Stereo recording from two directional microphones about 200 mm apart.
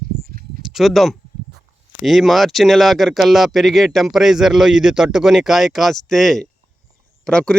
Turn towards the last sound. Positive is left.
turn(degrees=5)  # may be behind; listen again after turning